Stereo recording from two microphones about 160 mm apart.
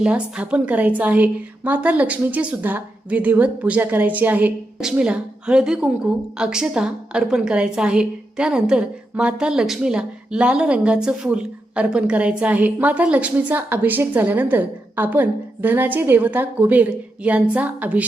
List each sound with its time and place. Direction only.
0.0 s a woman's voice: 5° right (ahead or behind)